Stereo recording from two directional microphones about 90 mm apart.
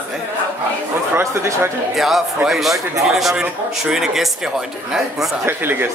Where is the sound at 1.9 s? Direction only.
Centre (ahead or behind).